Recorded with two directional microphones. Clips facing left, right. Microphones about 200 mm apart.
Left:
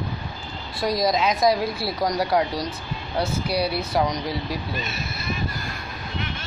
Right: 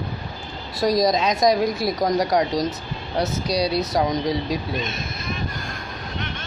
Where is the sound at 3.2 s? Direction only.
40° right (ahead or behind).